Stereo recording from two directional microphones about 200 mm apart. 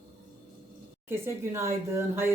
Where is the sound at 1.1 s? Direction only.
15° right (ahead or behind).